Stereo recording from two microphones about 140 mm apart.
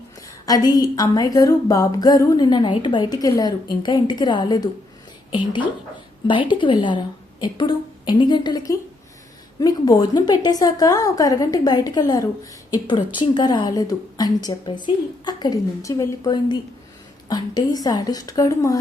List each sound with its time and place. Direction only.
0.2 s speech: 25° left (ahead or behind)
6.2 s a woman's voice: 35° left (ahead or behind)